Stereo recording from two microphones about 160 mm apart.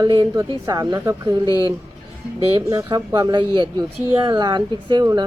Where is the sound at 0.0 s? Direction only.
25° right (ahead or behind).